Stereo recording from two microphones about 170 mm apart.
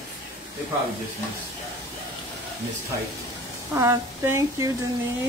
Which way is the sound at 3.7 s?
15° right (ahead or behind).